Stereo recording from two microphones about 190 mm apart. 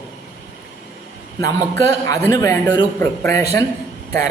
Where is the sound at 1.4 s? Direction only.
15° left (ahead or behind).